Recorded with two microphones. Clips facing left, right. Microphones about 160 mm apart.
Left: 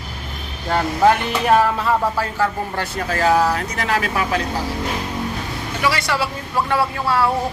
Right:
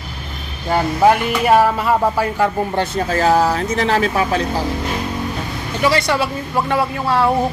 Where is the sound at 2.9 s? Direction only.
30° right (ahead or behind).